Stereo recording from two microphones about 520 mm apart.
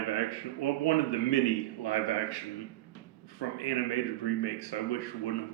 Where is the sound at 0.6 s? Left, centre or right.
Left.